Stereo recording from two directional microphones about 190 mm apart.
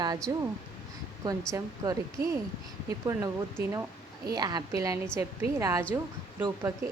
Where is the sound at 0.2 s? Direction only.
5° left (ahead or behind).